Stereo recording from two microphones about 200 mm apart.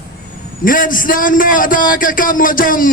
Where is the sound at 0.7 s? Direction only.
45° left (ahead or behind).